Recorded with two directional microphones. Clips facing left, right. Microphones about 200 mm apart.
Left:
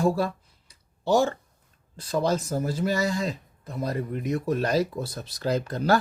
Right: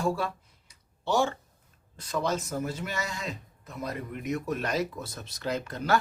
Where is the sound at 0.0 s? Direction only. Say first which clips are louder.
Left 5 dB; 40° left (ahead or behind).